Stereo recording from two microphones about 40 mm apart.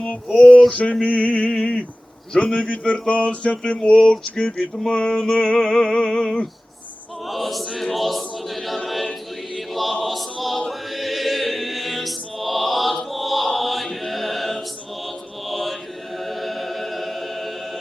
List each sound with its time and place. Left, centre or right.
0.0 s music: left
1.5 s a sound: left
4.4 s music: left
4.9 s a sound: left
7.3 s choir: centre
10.7 s chant: centre
16.1 s choir: centre